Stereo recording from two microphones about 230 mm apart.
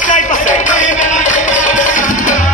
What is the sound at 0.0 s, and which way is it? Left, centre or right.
Music, left.